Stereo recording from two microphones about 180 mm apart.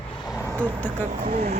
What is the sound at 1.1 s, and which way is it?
Speech, 55° right (ahead or behind).